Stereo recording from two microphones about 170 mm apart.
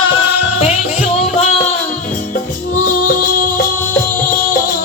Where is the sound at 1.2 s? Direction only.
40° left (ahead or behind).